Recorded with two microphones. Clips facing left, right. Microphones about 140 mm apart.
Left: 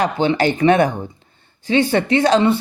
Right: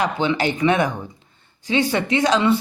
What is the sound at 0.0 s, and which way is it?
Speech, 35° left (ahead or behind).